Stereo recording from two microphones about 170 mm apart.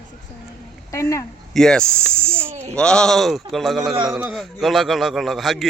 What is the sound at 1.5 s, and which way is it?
A man's voice, 5° left (ahead or behind).